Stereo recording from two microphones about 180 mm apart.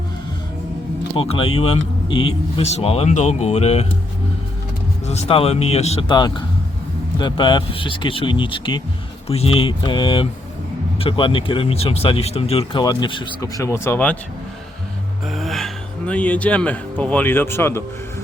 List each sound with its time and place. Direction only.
1.1 s speech: 30° left (ahead or behind)
2.0 s speech: 90° left
2.6 s speech: 35° left (ahead or behind)
5.0 s speech: 35° left (ahead or behind); by 14.2 s 10° left (ahead or behind)
15.3 s speech: centre (ahead or behind)